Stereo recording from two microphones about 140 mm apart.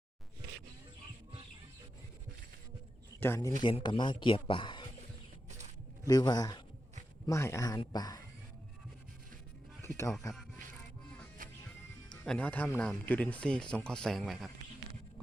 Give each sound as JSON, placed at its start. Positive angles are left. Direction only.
{"t": 3.2, "sound": "speech", "side_deg": 20}
{"t": 3.6, "sound": "speech", "side_deg": 35}
{"t": 5.5, "sound": "a sound", "side_deg": -55}
{"t": 6.1, "sound": "a man's voice", "side_deg": 30}
{"t": 10.0, "sound": "a man's voice", "side_deg": 25}
{"t": 11.4, "sound": "music", "side_deg": -75}
{"t": 12.2, "sound": "speech", "side_deg": 10}